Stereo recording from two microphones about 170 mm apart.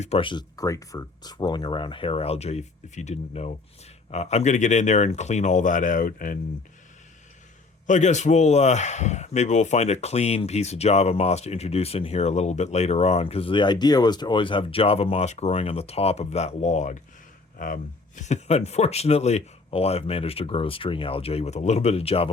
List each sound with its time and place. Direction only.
0.0 s speech: 35° left (ahead or behind); by 6.4 s 55° left (ahead or behind)
7.9 s speech: 45° left (ahead or behind)